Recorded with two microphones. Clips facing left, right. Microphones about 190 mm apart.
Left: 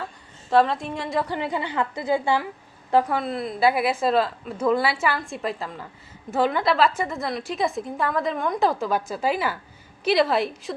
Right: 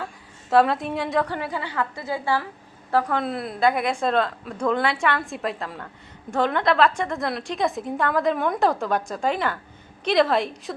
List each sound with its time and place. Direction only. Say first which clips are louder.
0.5 s a woman's voice: right 1 dB; centre (ahead or behind)
1.3 s a woman's voice: left 2 dB; 20° left (ahead or behind)
3.2 s a woman's voice: even; centre (ahead or behind)